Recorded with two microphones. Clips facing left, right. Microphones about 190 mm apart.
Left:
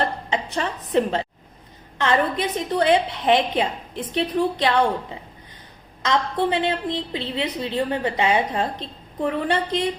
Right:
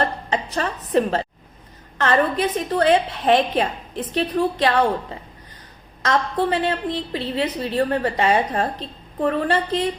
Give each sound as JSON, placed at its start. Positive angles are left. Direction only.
{"t": 0.3, "sound": "a woman's voice", "side_deg": 20}